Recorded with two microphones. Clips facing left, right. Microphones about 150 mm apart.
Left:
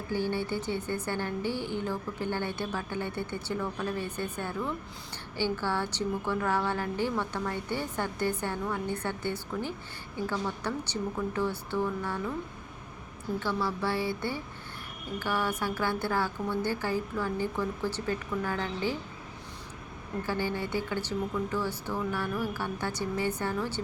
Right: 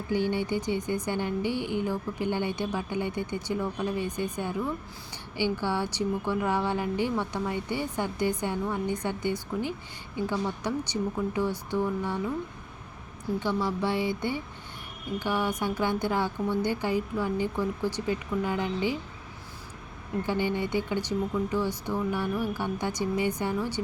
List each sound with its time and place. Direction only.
0.1 s speech: 15° right (ahead or behind)
13.4 s speech: 15° right (ahead or behind)
20.2 s speech: 20° right (ahead or behind)